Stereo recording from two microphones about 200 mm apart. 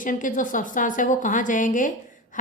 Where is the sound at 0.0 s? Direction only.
40° left (ahead or behind).